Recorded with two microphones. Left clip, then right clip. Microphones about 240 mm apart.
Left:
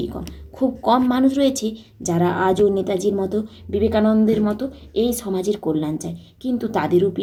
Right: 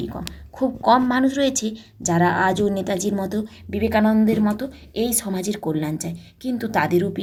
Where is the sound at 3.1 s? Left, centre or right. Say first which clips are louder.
Left 4 dB; right.